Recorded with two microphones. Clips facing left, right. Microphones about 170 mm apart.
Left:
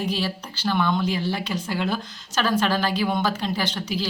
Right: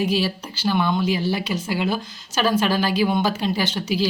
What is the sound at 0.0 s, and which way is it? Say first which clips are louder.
Speech: right 4 dB; 10° right (ahead or behind).